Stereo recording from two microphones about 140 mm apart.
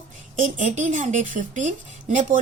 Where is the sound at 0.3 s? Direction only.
65° right (ahead or behind).